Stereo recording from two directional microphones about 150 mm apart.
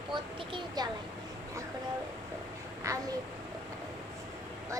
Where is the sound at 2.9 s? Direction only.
20° right (ahead or behind).